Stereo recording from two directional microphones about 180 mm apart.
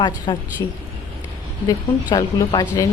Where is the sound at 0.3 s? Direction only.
20° left (ahead or behind).